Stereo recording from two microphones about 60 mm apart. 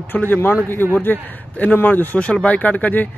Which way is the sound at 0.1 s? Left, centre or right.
Left.